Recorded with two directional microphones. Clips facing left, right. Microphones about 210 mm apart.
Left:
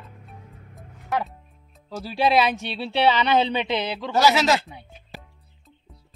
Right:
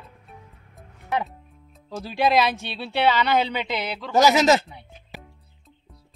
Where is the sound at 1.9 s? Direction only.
5° left (ahead or behind).